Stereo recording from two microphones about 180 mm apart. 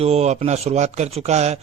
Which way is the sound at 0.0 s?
35° right (ahead or behind).